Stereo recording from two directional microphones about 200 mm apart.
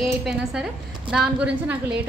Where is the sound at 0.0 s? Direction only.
Centre (ahead or behind).